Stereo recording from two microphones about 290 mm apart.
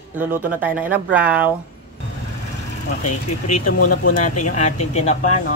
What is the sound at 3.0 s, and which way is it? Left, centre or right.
Speech, left.